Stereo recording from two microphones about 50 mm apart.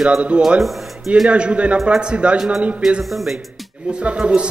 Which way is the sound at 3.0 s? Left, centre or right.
Centre.